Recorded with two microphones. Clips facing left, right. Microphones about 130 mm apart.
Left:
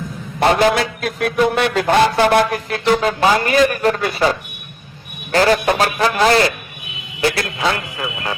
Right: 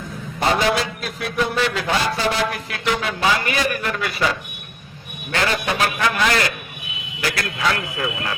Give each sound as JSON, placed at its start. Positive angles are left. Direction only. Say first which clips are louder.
{"t": 0.3, "sound": "a man's voice", "louder": "left 5 dB", "side_deg": 60}